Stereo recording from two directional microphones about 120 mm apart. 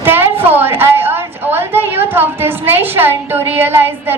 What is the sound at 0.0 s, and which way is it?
A woman's voice, 15° right (ahead or behind).